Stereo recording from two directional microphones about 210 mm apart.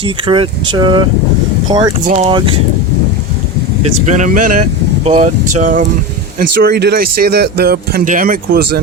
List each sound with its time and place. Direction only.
0.0 s speech: 25° right (ahead or behind)
2.0 s speech: 30° right (ahead or behind)
4.0 s speech: 35° right (ahead or behind)